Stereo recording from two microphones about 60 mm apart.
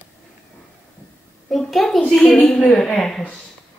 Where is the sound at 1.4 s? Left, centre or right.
Centre.